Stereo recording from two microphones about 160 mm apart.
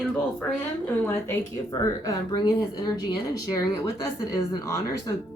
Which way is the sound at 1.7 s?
20° left (ahead or behind).